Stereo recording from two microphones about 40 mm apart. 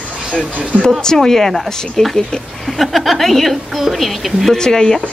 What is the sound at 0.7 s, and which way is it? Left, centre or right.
Speech, right.